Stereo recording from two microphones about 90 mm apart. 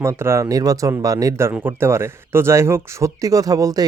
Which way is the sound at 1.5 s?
25° right (ahead or behind).